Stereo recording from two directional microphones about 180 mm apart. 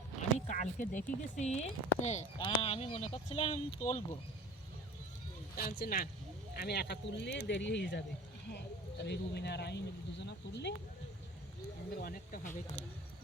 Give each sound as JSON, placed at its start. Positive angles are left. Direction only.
{"t": 0.2, "sound": "speech", "side_deg": 40}
{"t": 5.5, "sound": "speech", "side_deg": 55}
{"t": 11.9, "sound": "speech", "side_deg": 55}